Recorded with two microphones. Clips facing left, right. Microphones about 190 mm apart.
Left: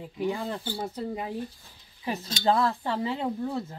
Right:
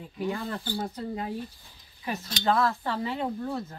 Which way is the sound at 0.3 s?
20° left (ahead or behind).